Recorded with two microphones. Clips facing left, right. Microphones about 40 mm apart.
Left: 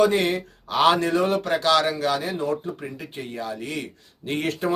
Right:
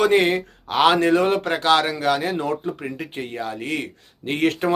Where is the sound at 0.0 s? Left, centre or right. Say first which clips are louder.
Right 3 dB; right.